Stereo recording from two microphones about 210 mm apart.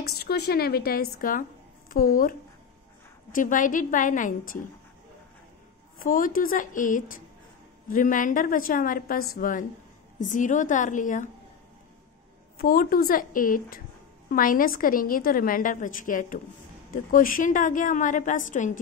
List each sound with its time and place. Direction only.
0.2 s a woman's voice: 50° left (ahead or behind)
6.0 s a woman's voice: 40° left (ahead or behind)
12.5 s a woman's voice: 45° left (ahead or behind)